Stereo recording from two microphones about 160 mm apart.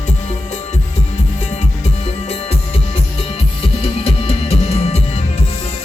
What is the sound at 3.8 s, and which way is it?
Music, 35° left (ahead or behind).